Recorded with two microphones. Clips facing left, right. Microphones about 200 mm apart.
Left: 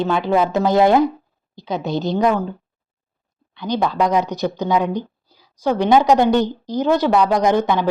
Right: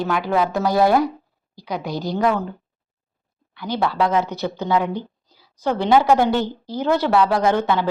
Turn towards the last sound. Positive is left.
turn(degrees=15)  # may be behind; listen again after turning